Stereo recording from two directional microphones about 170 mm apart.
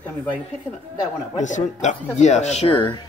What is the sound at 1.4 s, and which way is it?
Speech, 45° left (ahead or behind).